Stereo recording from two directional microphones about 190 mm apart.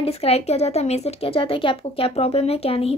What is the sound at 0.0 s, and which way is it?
Speech, 30° left (ahead or behind).